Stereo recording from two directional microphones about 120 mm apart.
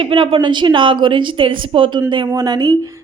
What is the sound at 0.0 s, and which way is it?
A woman's voice, 45° right (ahead or behind).